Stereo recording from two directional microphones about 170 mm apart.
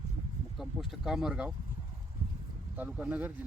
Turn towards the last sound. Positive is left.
turn(degrees=-5)  # may be behind; listen again after turning